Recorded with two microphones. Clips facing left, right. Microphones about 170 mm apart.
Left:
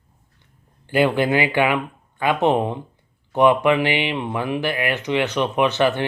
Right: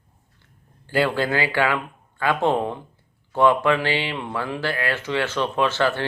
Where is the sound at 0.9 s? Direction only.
20° left (ahead or behind).